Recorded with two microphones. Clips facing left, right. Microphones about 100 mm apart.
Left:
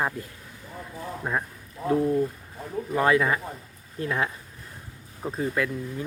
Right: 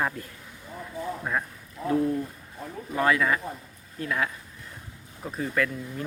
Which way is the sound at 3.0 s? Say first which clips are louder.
Left 1 dB; 25° left (ahead or behind).